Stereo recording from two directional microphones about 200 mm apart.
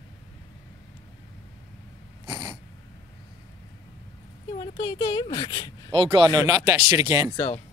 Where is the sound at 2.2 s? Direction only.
15° right (ahead or behind).